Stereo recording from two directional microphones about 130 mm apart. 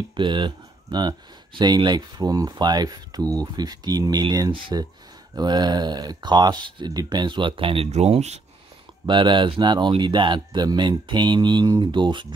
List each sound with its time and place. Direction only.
0.1 s speech: 35° right (ahead or behind); by 8.4 s 55° right (ahead or behind)
9.0 s speech: 40° right (ahead or behind)